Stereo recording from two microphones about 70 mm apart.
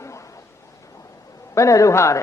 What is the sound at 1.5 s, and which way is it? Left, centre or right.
Speech, left.